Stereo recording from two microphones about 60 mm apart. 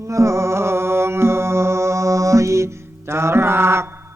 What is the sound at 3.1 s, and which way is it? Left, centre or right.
Mantra, right.